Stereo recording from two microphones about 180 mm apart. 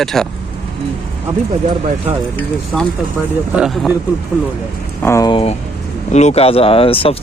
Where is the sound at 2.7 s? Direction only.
5° left (ahead or behind).